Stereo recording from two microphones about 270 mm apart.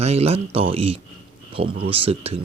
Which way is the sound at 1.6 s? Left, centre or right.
Right.